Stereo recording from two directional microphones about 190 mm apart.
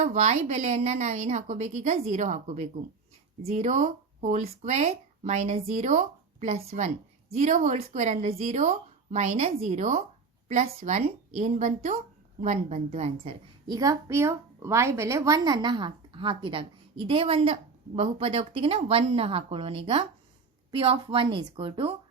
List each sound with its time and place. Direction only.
0.0 s speech: 40° right (ahead or behind)
13.7 s a woman's voice: 20° right (ahead or behind)